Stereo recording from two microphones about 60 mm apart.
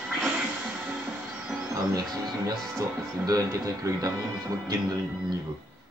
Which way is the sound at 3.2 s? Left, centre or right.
Right.